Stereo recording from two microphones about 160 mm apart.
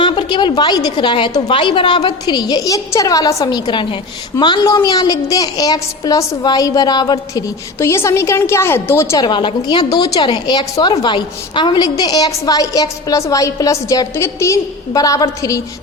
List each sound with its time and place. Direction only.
0.0 s a woman's voice: 30° left (ahead or behind)